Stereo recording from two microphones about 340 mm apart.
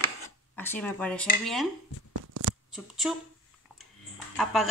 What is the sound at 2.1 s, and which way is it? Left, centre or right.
Shuffling cards, right.